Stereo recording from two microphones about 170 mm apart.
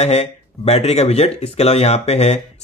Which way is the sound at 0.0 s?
40° left (ahead or behind).